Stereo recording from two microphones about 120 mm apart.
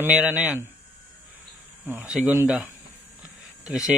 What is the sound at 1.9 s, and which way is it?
A man's voice, 15° right (ahead or behind).